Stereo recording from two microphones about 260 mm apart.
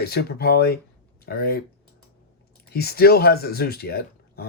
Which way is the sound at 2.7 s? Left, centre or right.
Left.